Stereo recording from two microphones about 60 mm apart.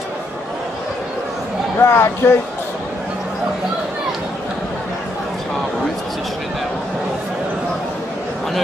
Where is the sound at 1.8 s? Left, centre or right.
Left.